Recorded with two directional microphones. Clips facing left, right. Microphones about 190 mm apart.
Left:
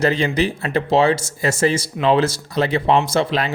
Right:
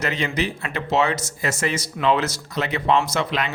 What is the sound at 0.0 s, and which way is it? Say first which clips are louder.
Speech: left 6 dB; 30° left (ahead or behind).